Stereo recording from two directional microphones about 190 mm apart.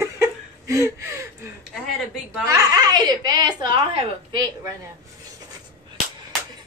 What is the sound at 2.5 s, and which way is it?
Speech, 20° right (ahead or behind).